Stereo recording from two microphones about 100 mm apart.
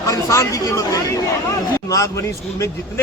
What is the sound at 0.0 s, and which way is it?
A man's voice, 30° left (ahead or behind).